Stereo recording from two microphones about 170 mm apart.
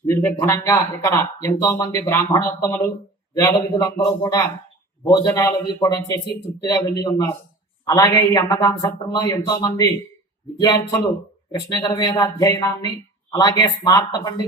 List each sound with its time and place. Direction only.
0.0 s a woman's voice: 15° left (ahead or behind)